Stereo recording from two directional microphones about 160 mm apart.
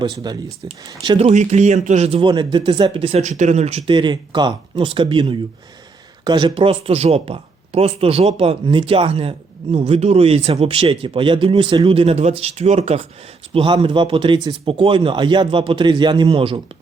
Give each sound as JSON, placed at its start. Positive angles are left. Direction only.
{"t": 0.0, "sound": "speech", "side_deg": -30}